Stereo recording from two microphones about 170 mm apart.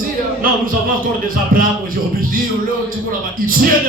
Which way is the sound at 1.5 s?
60° right (ahead or behind).